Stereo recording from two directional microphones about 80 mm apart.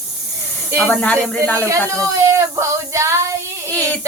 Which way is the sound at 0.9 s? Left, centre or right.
Centre.